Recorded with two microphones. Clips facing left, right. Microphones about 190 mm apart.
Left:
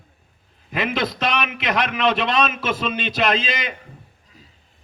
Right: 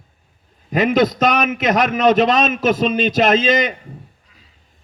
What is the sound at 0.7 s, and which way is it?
A man's voice, 40° right (ahead or behind).